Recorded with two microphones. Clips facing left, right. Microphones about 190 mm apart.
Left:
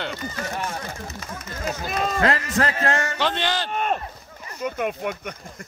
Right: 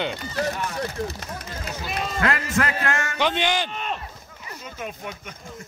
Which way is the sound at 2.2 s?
35° left (ahead or behind).